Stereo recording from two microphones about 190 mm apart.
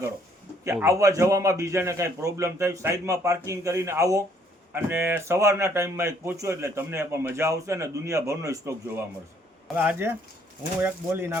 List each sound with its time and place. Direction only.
0.6 s speech: 15° right (ahead or behind)